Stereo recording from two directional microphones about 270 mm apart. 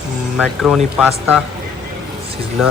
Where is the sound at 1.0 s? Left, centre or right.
Centre.